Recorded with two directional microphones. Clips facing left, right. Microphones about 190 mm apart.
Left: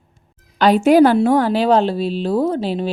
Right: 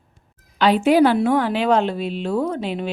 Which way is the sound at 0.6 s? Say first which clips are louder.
Left 4 dB; 45° left (ahead or behind).